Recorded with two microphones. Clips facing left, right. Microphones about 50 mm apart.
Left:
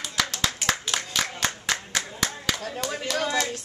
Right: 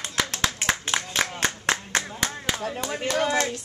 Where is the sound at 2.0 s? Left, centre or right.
Right.